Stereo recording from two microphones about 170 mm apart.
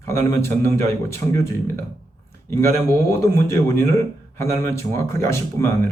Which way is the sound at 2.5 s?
15° left (ahead or behind).